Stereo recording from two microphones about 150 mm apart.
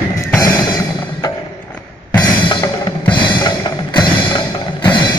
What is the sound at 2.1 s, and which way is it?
Music, 25° left (ahead or behind).